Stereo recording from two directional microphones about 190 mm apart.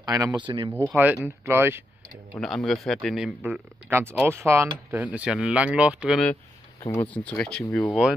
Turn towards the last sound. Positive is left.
turn(degrees=5)  # may be behind; listen again after turning